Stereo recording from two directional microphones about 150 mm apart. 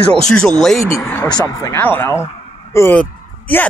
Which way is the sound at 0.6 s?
Centre (ahead or behind).